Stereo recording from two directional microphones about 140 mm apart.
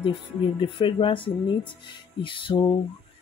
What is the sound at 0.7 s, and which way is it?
Speech, 40° left (ahead or behind).